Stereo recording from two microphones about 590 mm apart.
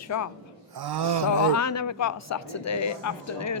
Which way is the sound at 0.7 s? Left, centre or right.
Right.